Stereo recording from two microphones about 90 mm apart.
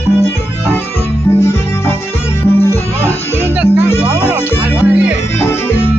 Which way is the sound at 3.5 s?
15° right (ahead or behind).